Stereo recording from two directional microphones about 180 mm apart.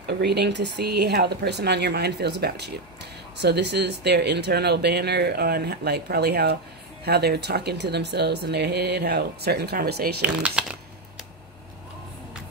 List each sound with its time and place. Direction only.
0.2 s speech: 65° right (ahead or behind)
10.2 s speech: 5° right (ahead or behind)